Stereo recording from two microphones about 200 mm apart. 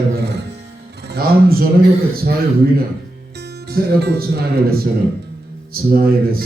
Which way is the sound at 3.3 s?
55° right (ahead or behind).